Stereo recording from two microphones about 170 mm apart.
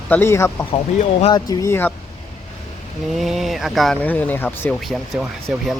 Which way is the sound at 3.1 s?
Centre (ahead or behind).